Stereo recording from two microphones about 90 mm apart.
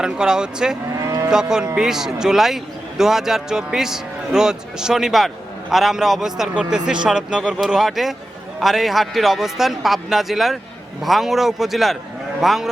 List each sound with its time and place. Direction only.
0.0 s a man's voice: 10° right (ahead or behind)
1.0 s moo: 35° right (ahead or behind)
1.3 s a man's voice: 5° right (ahead or behind)